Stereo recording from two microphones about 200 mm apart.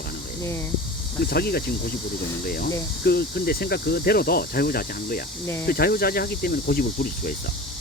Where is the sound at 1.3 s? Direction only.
50° left (ahead or behind).